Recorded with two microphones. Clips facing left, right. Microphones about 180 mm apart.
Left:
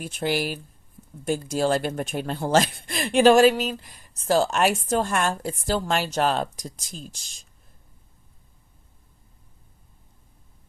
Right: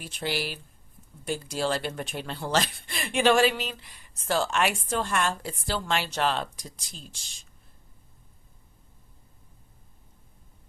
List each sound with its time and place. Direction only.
0.0 s a woman's voice: 50° left (ahead or behind)